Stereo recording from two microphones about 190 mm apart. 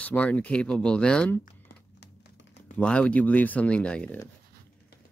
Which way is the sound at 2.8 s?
5° left (ahead or behind).